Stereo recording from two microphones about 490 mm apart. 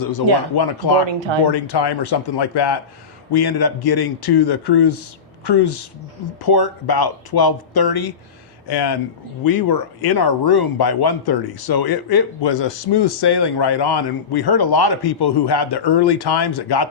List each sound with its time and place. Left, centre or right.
0.0 s speech: left
1.0 s speech: right
1.5 s speech: left